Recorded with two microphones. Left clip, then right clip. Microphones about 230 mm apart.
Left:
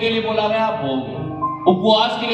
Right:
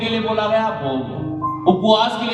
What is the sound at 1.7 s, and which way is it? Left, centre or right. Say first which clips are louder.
Speech: even; right.